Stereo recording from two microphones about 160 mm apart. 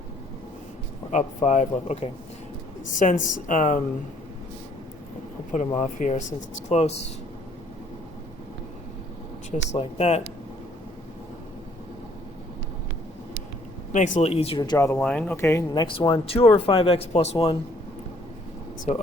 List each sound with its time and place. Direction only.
1.1 s speech: 50° left (ahead or behind)
5.5 s speech: 50° left (ahead or behind)
9.7 s speech: 40° left (ahead or behind)
13.9 s speech: 50° left (ahead or behind)
14.6 s speech: 20° left (ahead or behind)
15.0 s speech: 5° left (ahead or behind); by 17.6 s 35° left (ahead or behind)